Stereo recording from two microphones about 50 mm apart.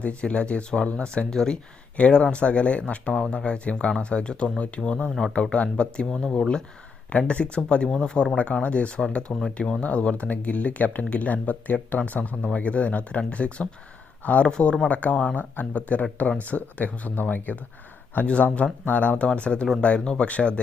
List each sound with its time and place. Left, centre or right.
0.0 s speech: left
3.1 s speech: centre
6.1 s speech: centre
7.1 s speech: left
8.6 s speech: left
9.0 s speech: centre
9.8 s speech: left
15.1 s speech: centre
15.4 s speech: left